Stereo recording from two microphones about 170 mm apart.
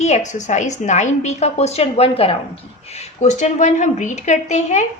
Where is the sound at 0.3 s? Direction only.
45° left (ahead or behind).